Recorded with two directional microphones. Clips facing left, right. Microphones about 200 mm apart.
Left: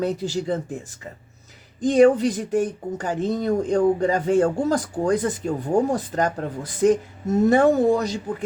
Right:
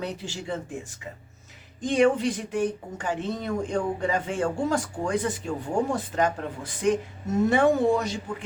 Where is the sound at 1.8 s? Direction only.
40° left (ahead or behind).